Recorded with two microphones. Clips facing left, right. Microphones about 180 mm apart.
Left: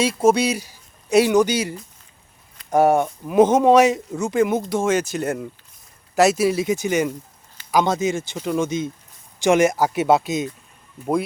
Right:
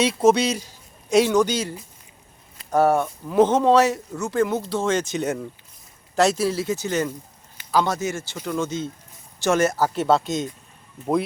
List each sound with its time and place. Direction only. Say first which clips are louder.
0.0 s a man's voice: even; 5° left (ahead or behind)
2.7 s speech: left 2 dB; 15° left (ahead or behind)